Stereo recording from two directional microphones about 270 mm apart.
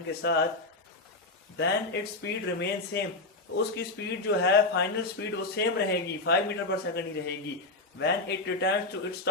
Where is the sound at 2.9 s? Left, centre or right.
Left.